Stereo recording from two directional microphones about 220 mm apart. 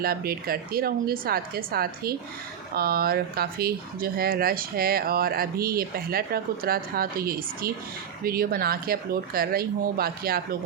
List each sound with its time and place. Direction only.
0.0 s speech: 45° right (ahead or behind)